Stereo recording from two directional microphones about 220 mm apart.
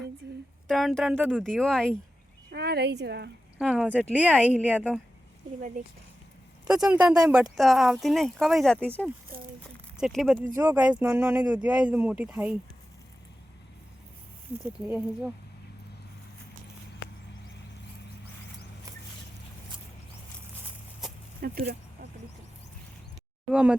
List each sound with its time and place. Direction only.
0.7 s speech: centre (ahead or behind)
2.5 s speech: 50° right (ahead or behind)
3.6 s speech: centre (ahead or behind)
6.7 s speech: 5° right (ahead or behind)
10.0 s speech: centre (ahead or behind)
14.8 s speech: 10° right (ahead or behind)
21.4 s speech: 45° right (ahead or behind)
23.5 s speech: 5° right (ahead or behind)